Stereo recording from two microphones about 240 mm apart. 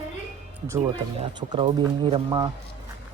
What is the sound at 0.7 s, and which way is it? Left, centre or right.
Speech, centre.